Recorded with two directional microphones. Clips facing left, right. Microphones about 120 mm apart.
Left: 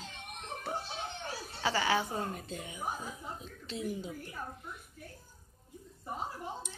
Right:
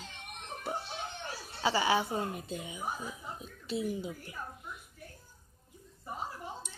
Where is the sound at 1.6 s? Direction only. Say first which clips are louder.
Right 2 dB; 15° right (ahead or behind).